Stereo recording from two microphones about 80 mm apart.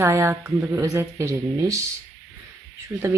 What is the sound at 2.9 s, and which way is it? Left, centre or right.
Speech, right.